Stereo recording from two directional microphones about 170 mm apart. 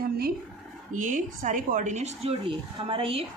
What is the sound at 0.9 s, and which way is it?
Speech, 50° right (ahead or behind).